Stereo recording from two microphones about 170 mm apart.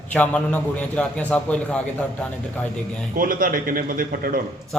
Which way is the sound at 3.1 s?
55° right (ahead or behind).